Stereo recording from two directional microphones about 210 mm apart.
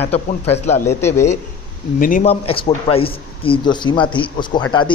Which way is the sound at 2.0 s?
40° left (ahead or behind).